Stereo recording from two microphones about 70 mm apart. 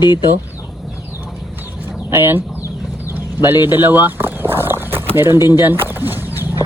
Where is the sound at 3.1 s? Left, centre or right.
Right.